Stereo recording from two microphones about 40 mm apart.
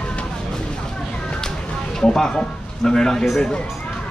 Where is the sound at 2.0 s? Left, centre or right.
Centre.